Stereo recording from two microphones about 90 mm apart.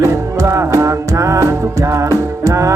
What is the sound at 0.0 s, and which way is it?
Music, 30° right (ahead or behind).